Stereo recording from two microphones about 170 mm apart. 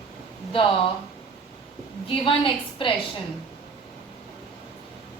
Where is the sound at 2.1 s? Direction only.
30° left (ahead or behind).